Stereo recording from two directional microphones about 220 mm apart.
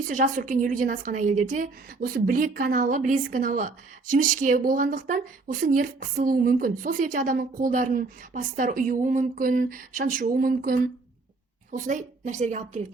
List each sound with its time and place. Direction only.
0.1 s a woman's voice: 35° right (ahead or behind)